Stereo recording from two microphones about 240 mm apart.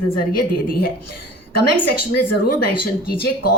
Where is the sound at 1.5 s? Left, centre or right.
Left.